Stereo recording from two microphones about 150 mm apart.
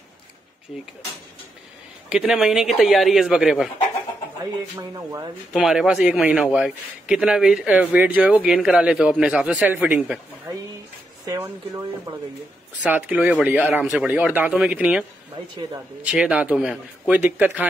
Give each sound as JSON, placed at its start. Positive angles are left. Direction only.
{"t": 2.0, "sound": "a man's voice", "side_deg": -5}
{"t": 4.7, "sound": "speech", "side_deg": -20}
{"t": 5.5, "sound": "a man's voice", "side_deg": -5}
{"t": 11.2, "sound": "speech", "side_deg": -20}